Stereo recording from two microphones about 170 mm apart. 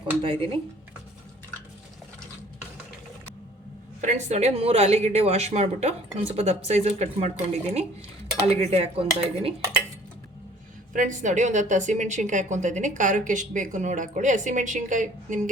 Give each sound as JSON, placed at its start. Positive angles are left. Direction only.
{"t": 0.2, "sound": "a woman's voice", "side_deg": -30}
{"t": 4.0, "sound": "a woman's voice", "side_deg": -45}
{"t": 10.9, "sound": "speech", "side_deg": -45}